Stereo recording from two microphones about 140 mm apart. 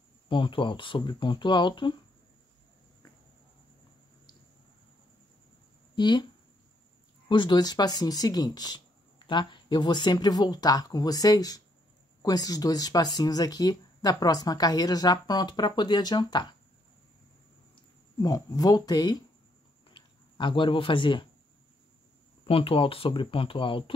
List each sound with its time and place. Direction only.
0.3 s speech: 35° left (ahead or behind)
5.9 s speech: 30° left (ahead or behind)
7.2 s speech: 35° left (ahead or behind)
18.2 s speech: 30° left (ahead or behind)
22.5 s speech: 40° left (ahead or behind)